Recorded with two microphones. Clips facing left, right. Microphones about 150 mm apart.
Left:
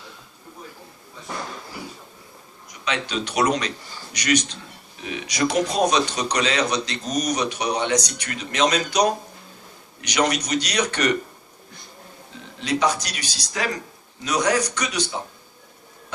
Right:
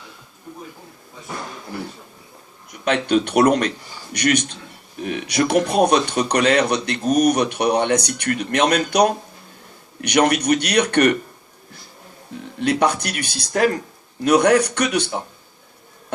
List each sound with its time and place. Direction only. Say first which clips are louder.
2.6 s speech: right 8 dB; 55° right (ahead or behind)
12.5 s speech: right 4 dB; 55° right (ahead or behind)